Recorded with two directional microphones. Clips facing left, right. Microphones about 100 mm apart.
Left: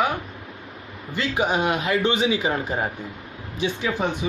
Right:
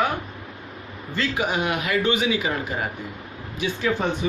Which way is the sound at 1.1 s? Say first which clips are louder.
Even; 15° left (ahead or behind).